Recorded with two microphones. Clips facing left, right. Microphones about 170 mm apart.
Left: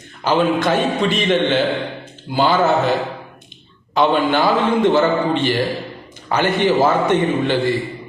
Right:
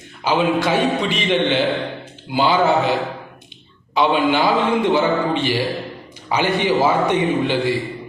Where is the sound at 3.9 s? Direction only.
50° left (ahead or behind).